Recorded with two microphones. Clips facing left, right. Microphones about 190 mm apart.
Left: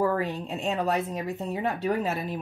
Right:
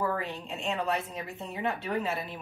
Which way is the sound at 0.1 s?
40° left (ahead or behind).